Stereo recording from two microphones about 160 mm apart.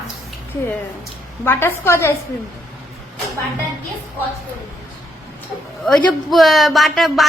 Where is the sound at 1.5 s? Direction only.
15° left (ahead or behind).